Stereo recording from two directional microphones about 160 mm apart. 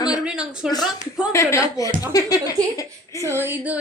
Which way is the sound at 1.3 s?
20° left (ahead or behind).